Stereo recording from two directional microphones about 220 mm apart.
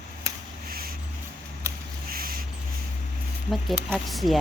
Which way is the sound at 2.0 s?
40° right (ahead or behind).